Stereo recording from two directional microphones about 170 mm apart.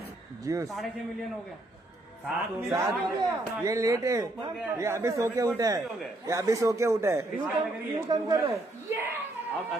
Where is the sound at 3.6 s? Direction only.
20° right (ahead or behind).